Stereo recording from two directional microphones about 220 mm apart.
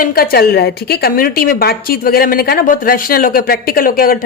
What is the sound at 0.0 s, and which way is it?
A woman's voice, 40° left (ahead or behind).